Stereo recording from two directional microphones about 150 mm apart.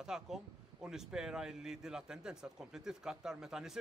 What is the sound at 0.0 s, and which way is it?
A man's voice, 5° right (ahead or behind).